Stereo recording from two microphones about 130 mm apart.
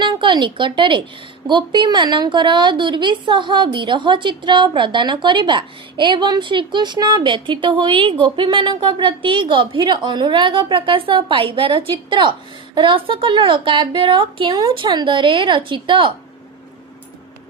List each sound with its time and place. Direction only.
0.0 s a woman's voice: 35° right (ahead or behind)